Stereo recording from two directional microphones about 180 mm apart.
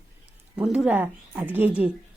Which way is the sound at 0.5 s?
5° right (ahead or behind).